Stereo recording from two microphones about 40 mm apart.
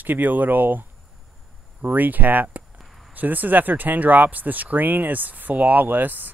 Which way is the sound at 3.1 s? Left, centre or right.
Right.